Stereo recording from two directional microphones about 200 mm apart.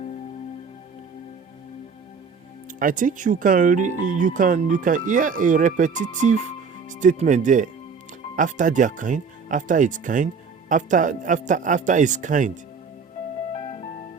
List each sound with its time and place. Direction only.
2.7 s speech: 40° right (ahead or behind)